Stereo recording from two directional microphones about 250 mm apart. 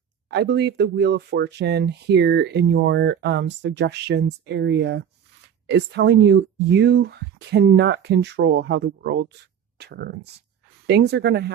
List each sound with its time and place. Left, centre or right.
0.3 s speech: right